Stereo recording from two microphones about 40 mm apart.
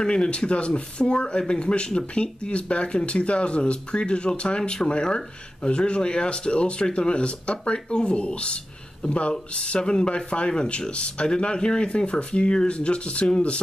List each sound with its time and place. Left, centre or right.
0.0 s speech: left